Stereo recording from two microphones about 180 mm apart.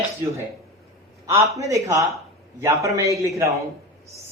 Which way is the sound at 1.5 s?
15° right (ahead or behind).